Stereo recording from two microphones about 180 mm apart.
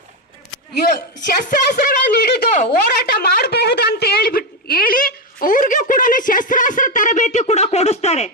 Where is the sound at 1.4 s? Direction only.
55° left (ahead or behind).